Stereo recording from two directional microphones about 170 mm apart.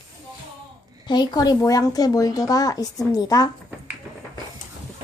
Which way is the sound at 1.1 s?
25° left (ahead or behind).